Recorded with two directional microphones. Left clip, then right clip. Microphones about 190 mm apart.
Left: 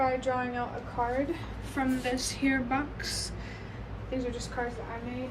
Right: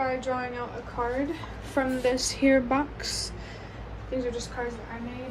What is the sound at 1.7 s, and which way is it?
A woman's voice, 25° right (ahead or behind).